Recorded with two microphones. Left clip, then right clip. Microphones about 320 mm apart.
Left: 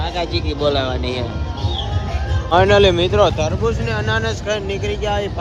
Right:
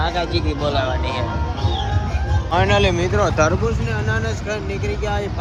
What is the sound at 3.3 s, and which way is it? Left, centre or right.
Speech, centre.